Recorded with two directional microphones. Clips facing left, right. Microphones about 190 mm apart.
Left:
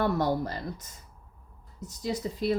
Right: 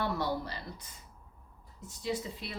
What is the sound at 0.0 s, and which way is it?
A woman's voice, 50° left (ahead or behind).